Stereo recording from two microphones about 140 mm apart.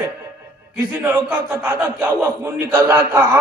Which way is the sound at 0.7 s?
15° right (ahead or behind).